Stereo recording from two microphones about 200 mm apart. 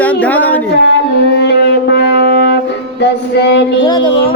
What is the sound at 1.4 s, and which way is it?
Music, 60° left (ahead or behind).